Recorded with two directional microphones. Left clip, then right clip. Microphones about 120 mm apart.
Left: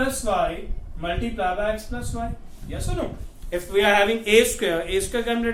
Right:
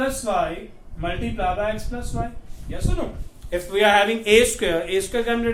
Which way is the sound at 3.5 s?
35° right (ahead or behind).